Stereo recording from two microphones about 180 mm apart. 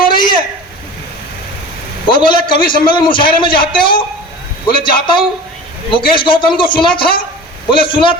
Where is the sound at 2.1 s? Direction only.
25° left (ahead or behind).